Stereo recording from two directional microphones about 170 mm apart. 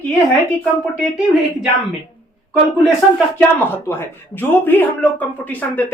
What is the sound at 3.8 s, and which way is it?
A woman's voice, 15° left (ahead or behind).